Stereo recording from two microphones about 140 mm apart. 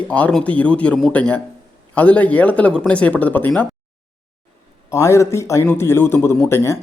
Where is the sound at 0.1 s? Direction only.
10° left (ahead or behind).